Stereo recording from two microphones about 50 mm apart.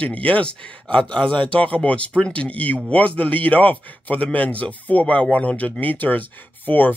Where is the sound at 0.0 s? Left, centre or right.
Left.